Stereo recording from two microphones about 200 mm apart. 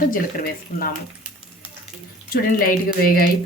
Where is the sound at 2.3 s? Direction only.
45° left (ahead or behind).